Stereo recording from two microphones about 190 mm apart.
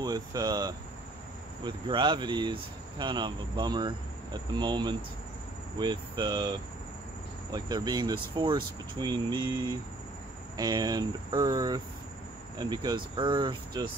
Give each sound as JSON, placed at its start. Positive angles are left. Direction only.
{"t": 0.0, "sound": "speech", "side_deg": -20}
{"t": 7.5, "sound": "speech", "side_deg": -20}